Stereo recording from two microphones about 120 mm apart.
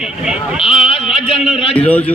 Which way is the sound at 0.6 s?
50° left (ahead or behind).